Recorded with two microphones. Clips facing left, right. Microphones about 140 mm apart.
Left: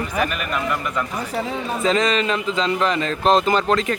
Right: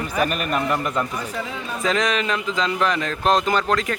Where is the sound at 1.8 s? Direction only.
Centre (ahead or behind).